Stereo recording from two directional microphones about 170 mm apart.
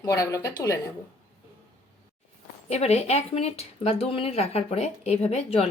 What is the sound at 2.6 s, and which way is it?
Speech, 40° left (ahead or behind).